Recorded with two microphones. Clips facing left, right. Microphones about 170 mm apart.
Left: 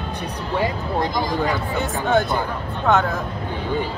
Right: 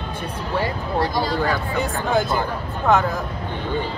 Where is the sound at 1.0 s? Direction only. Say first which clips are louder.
Right 1 dB; 20° left (ahead or behind).